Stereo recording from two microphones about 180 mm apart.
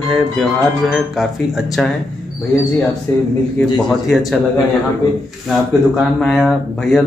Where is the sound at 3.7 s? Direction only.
Centre (ahead or behind).